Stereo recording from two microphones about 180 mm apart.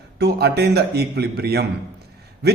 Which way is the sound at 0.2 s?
65° right (ahead or behind).